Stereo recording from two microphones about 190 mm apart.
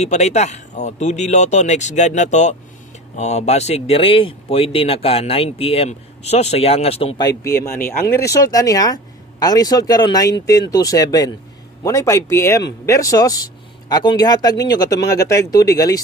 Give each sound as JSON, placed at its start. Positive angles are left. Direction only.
{"t": 0.0, "sound": "speech", "side_deg": 35}